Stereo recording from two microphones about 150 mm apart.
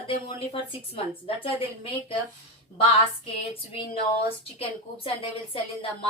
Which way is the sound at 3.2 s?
35° left (ahead or behind).